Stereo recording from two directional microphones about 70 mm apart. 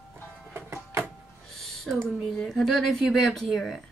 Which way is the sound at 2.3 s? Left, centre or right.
Centre.